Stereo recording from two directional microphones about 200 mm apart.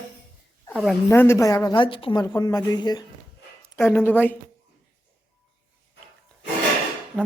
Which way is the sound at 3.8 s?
10° left (ahead or behind).